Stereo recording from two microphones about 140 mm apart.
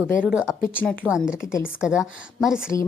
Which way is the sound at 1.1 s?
5° right (ahead or behind).